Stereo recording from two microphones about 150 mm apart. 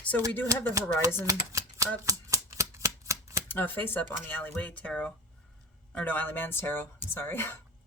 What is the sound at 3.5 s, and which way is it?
Speech, 15° left (ahead or behind).